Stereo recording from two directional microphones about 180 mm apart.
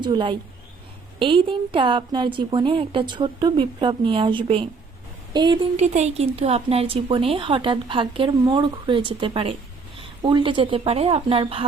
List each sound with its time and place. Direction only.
0.0 s speech: 25° right (ahead or behind)
5.7 s speech: 40° right (ahead or behind)